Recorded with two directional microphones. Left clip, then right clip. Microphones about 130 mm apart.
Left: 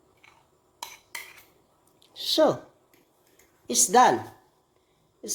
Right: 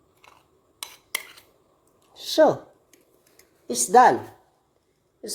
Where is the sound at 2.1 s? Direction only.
15° right (ahead or behind).